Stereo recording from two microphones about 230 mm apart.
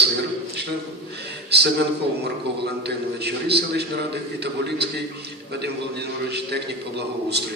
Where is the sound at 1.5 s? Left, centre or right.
Right.